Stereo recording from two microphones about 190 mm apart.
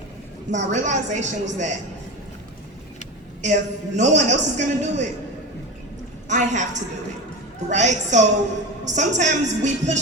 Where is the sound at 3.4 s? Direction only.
40° right (ahead or behind).